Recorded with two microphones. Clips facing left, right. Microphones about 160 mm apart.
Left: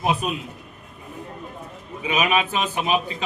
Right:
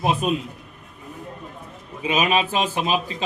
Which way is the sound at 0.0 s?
Centre (ahead or behind).